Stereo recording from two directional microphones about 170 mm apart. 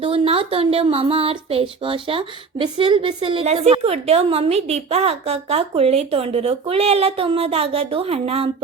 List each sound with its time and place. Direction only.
0.0 s a woman's voice: 35° right (ahead or behind)